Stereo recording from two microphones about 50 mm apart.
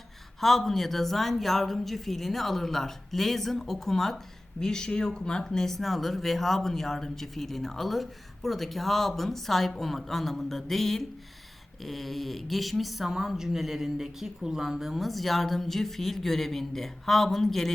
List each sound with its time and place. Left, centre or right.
0.3 s speech: centre